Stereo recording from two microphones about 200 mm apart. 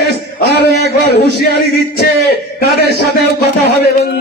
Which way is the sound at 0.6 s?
55° left (ahead or behind).